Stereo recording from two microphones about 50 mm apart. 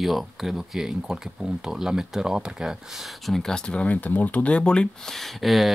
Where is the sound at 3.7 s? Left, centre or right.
Left.